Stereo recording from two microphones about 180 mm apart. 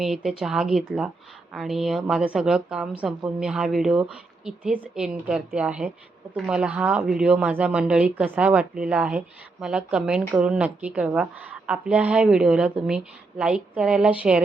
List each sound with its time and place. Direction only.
0.0 s a woman's voice: centre (ahead or behind)